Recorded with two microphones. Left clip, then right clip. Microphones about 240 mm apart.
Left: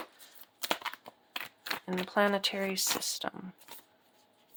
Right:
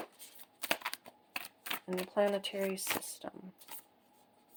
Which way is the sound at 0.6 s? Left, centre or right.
Centre.